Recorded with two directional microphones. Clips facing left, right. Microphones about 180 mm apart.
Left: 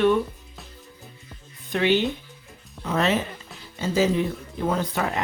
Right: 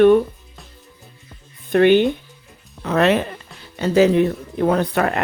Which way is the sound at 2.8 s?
65° right (ahead or behind).